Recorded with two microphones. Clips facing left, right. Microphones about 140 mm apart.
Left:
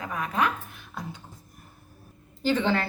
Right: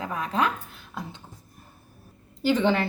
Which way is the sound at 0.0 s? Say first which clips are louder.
Right 1 dB; 30° right (ahead or behind).